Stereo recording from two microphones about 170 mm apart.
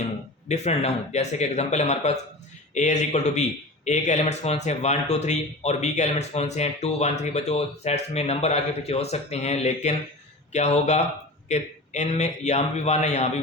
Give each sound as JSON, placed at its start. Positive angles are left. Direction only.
{"t": 0.4, "sound": "speech", "side_deg": 40}